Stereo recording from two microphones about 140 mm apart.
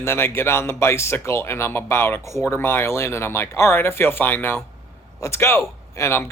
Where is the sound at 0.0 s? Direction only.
15° left (ahead or behind).